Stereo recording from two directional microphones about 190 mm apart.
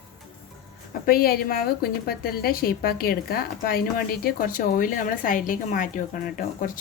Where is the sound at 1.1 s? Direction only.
55° left (ahead or behind).